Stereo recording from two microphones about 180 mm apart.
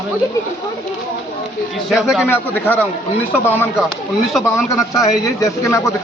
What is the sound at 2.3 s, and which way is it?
Speech, 10° left (ahead or behind).